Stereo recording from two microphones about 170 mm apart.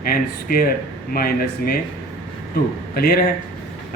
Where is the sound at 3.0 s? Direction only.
60° left (ahead or behind).